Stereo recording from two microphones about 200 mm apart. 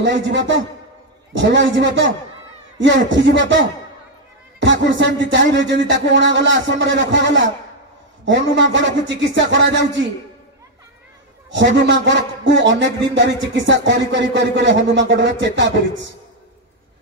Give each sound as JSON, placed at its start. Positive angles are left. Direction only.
{"t": 0.0, "sound": "a man's voice", "side_deg": -60}
{"t": 11.5, "sound": "a man's voice", "side_deg": -65}